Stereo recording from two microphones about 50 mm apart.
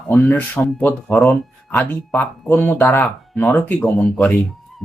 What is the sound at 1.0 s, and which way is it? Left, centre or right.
Speech, centre.